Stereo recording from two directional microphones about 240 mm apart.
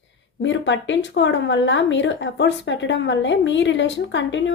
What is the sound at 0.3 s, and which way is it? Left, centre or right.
Speech, left.